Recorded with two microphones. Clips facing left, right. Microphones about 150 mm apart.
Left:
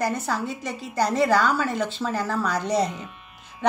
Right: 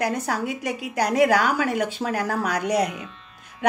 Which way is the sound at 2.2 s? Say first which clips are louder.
Left 1 dB; 60° right (ahead or behind).